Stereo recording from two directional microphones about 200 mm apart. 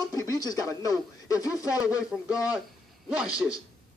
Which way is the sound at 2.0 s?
5° right (ahead or behind).